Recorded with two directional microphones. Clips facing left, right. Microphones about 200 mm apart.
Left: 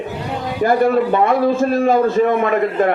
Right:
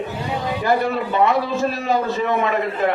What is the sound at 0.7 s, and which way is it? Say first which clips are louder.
A man's voice: left 6 dB; 50° left (ahead or behind).